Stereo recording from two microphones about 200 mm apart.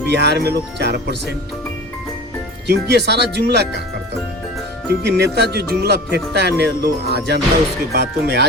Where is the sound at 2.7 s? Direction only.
55° right (ahead or behind).